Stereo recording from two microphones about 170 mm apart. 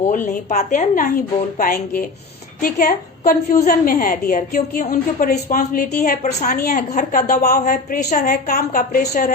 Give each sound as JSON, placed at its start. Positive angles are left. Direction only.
{"t": 0.1, "sound": "a woman's voice", "side_deg": 50}
{"t": 7.4, "sound": "a woman's voice", "side_deg": 60}